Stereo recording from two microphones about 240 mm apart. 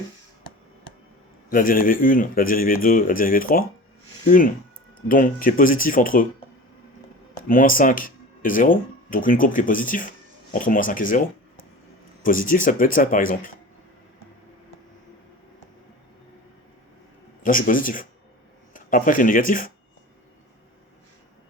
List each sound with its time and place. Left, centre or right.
1.5 s speech: left
7.4 s speech: left
12.2 s speech: left
17.4 s speech: left